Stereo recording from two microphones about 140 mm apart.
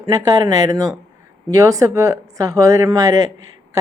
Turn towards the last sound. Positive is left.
turn(degrees=-20)  # may be behind; listen again after turning